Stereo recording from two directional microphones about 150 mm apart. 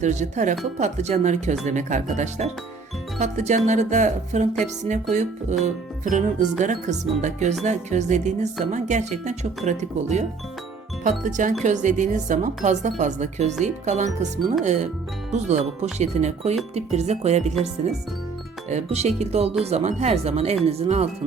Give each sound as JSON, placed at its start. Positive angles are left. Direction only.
{"t": 0.0, "sound": "speech", "side_deg": -50}
{"t": 18.7, "sound": "speech", "side_deg": -45}